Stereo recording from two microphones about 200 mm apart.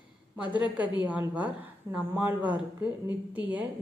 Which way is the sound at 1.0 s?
10° right (ahead or behind).